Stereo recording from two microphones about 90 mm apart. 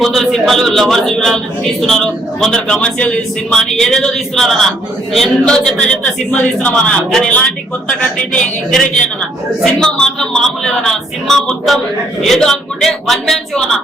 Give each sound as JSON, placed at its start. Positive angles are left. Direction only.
{"t": 0.0, "sound": "speech", "side_deg": 0}
{"t": 2.4, "sound": "a man's voice", "side_deg": 10}
{"t": 9.8, "sound": "speech", "side_deg": 5}